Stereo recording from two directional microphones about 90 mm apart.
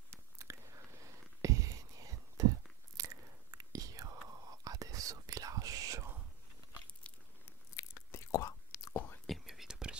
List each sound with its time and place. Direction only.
0.1 s biting: 30° right (ahead or behind)
1.0 s whispering: 40° right (ahead or behind)
3.0 s biting: 40° right (ahead or behind)
3.5 s whispering: 40° right (ahead or behind)
7.0 s a sound: 15° left (ahead or behind)
7.7 s biting: 30° left (ahead or behind)
9.2 s whispering: centre (ahead or behind)